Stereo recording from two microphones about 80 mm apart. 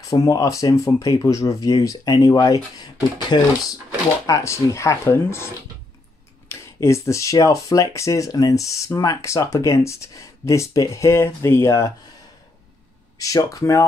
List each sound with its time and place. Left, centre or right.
0.1 s speech: left
3.3 s speech: left
4.3 s speech: left
6.5 s speech: left
13.2 s speech: left